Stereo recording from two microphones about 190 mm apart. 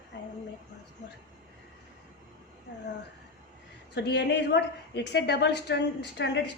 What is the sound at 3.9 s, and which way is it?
A woman's voice, 65° left (ahead or behind).